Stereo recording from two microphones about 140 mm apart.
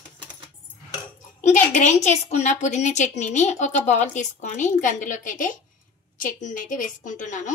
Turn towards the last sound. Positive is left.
turn(degrees=65)  # may be behind; listen again after turning